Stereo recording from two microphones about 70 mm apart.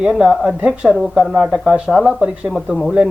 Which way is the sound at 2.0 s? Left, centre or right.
Centre.